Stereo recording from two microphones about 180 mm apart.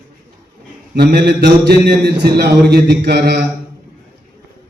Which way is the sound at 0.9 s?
60° right (ahead or behind).